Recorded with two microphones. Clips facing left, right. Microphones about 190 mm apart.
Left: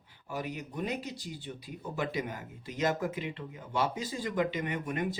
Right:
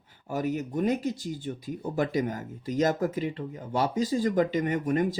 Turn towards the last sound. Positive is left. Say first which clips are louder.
# right 8 dB
turn(degrees=-45)  # may be behind; listen again after turning